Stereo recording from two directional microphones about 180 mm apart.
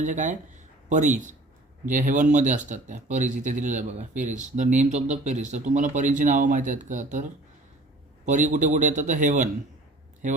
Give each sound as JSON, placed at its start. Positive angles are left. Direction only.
{"t": 0.0, "sound": "speech", "side_deg": -45}